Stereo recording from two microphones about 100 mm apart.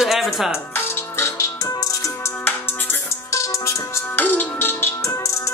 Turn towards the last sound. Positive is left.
turn(degrees=30)  # may be behind; listen again after turning